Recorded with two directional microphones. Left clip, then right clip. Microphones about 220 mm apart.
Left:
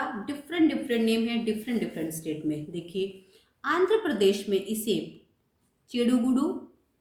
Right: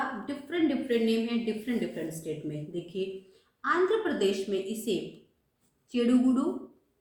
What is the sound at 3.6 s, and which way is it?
A woman's voice, 45° left (ahead or behind).